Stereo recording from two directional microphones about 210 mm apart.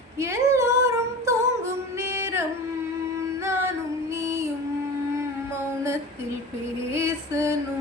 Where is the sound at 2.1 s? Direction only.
10° right (ahead or behind).